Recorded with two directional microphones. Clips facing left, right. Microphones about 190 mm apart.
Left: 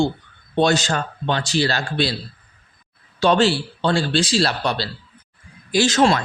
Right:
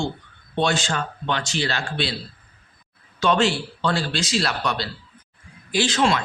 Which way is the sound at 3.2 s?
35° left (ahead or behind).